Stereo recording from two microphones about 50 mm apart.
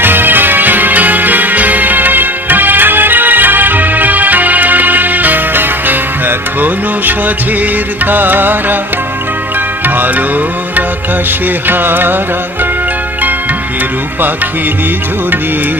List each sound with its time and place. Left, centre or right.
0.0 s music: right
9.8 s music: right
11.7 s music: right